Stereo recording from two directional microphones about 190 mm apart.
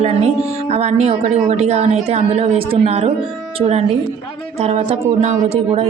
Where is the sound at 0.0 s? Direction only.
35° right (ahead or behind).